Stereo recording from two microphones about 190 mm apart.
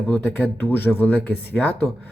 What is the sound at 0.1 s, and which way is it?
Speech, 10° left (ahead or behind).